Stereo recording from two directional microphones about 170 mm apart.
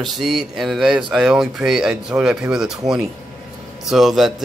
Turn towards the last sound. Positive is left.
turn(degrees=0)  # may be behind; listen again after turning